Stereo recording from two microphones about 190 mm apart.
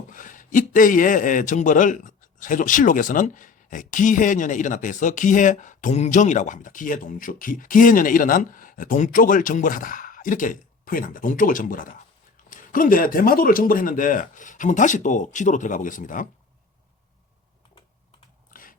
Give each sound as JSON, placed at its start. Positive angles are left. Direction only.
{"t": 0.1, "sound": "speech", "side_deg": 45}